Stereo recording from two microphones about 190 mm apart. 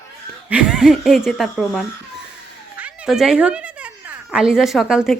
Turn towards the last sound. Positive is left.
turn(degrees=-5)  # may be behind; listen again after turning